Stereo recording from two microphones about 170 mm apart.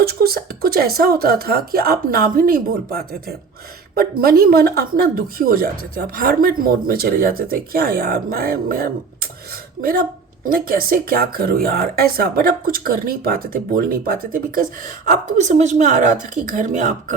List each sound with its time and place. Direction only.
0.0 s speech: 65° right (ahead or behind); by 17.2 s 45° right (ahead or behind)